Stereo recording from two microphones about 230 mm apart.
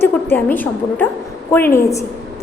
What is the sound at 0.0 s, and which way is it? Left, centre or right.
A woman's voice, centre.